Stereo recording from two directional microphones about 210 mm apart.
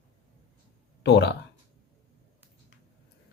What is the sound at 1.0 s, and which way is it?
Speech, 55° left (ahead or behind).